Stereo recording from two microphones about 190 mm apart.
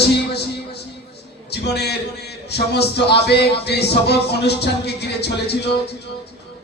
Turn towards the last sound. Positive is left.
turn(degrees=60)  # may be behind; listen again after turning